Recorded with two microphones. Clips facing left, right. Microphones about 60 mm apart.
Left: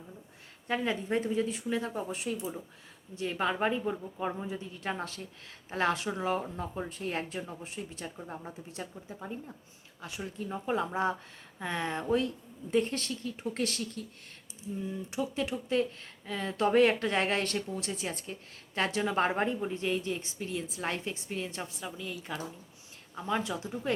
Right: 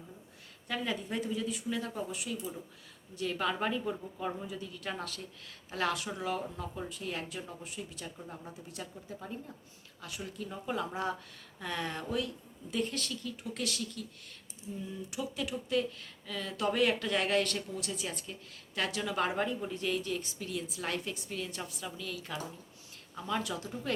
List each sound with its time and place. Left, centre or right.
0.7 s speech: left
15.1 s speech: left